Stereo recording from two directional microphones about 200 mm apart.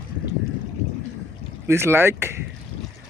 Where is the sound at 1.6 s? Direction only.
15° right (ahead or behind).